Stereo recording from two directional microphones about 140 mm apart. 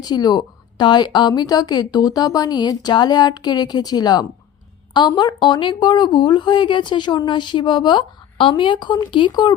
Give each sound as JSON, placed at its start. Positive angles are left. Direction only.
{"t": 0.0, "sound": "a woman's voice", "side_deg": 30}